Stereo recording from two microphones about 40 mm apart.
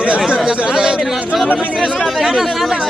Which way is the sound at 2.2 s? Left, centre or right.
Centre.